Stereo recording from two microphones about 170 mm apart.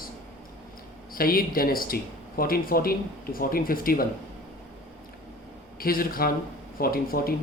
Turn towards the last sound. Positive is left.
turn(degrees=60)  # may be behind; listen again after turning